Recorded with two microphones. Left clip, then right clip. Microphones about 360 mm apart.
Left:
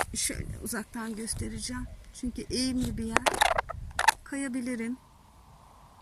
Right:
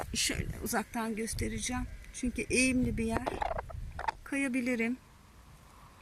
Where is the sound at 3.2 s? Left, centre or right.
Left.